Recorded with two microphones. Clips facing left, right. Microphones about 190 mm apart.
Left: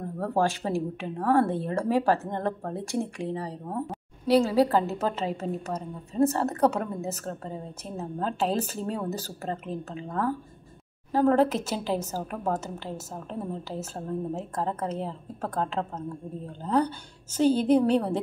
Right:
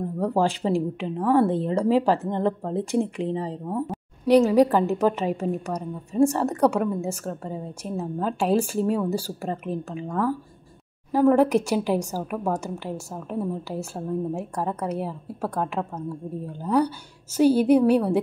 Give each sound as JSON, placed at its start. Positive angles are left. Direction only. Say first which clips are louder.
{"t": 0.4, "sound": "speech", "louder": "right 3 dB", "side_deg": -15}